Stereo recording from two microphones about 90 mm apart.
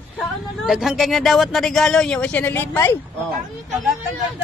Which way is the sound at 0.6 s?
5° right (ahead or behind).